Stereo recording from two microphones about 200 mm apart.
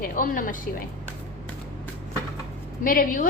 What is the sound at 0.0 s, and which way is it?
Speech, 40° left (ahead or behind).